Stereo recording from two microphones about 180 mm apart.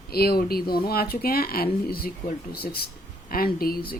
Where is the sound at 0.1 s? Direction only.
60° left (ahead or behind).